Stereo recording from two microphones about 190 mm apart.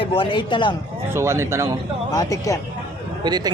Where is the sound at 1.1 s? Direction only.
15° right (ahead or behind).